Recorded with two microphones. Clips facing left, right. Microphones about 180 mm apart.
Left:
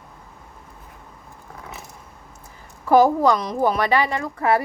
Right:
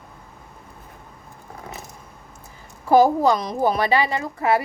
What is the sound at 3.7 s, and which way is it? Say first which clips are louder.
Speech: even; 30° right (ahead or behind).